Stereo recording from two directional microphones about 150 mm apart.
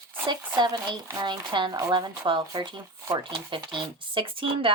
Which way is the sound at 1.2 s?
30° right (ahead or behind).